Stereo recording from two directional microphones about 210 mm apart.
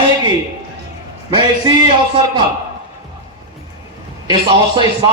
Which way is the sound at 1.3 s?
20° right (ahead or behind).